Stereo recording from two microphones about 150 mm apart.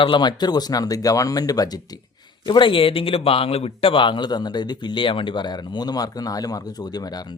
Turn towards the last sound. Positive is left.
turn(degrees=25)  # may be behind; listen again after turning